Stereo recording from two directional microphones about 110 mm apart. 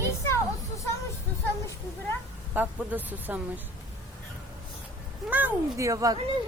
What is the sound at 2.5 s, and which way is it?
Speech, 15° right (ahead or behind).